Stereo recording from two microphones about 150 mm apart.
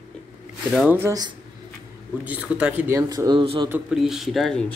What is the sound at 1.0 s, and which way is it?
Speech, 20° right (ahead or behind).